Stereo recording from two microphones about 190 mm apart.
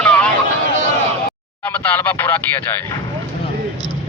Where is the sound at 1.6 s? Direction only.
10° left (ahead or behind).